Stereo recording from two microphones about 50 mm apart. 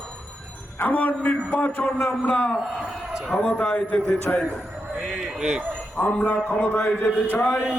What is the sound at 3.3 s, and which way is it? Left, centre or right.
A man's voice, left.